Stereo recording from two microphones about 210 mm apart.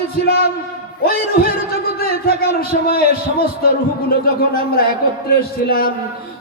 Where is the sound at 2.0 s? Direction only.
45° left (ahead or behind).